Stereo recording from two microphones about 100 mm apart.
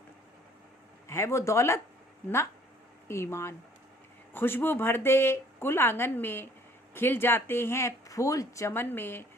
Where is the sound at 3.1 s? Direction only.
25° left (ahead or behind).